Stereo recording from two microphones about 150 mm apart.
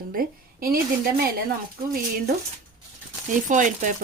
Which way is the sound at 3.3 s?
60° right (ahead or behind).